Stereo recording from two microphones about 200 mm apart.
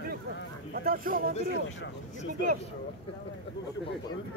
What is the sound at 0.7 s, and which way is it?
Speech, 45° right (ahead or behind).